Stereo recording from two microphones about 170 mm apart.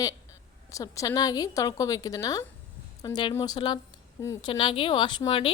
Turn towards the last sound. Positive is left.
turn(degrees=30)  # may be behind; listen again after turning